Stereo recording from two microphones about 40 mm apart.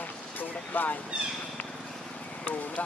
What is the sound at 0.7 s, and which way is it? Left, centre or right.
Speech, left.